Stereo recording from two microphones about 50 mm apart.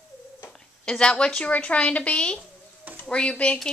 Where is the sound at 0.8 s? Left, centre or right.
Centre.